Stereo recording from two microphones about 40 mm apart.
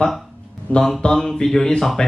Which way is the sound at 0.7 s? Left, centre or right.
Left.